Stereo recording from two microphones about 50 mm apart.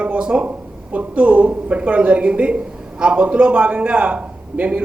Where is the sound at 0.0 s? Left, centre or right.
Right.